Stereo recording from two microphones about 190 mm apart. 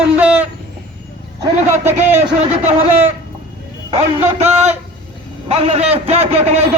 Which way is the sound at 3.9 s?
25° right (ahead or behind).